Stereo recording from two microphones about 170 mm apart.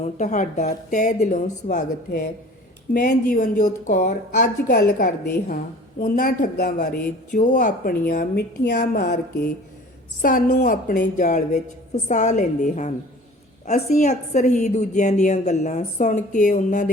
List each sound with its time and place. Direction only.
0.2 s a woman's voice: 45° left (ahead or behind)
2.9 s a woman's voice: 60° left (ahead or behind); by 12.9 s 45° left (ahead or behind)
13.9 s a woman's voice: 45° left (ahead or behind)